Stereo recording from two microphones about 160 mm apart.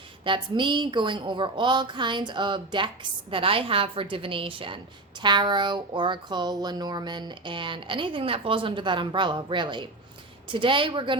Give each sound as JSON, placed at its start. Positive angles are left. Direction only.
{"t": 0.3, "sound": "a woman's voice", "side_deg": -30}